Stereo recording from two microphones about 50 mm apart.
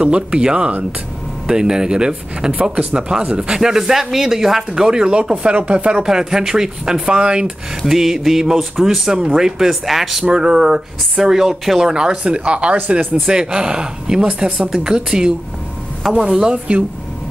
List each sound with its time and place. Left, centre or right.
0.0 s speech: centre
6.0 s speech: centre
7.8 s speech: centre